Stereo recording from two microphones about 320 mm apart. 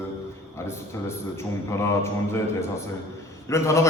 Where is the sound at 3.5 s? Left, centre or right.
Centre.